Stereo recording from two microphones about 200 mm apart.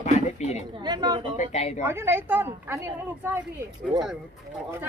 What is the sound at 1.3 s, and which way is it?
Speech, 35° left (ahead or behind).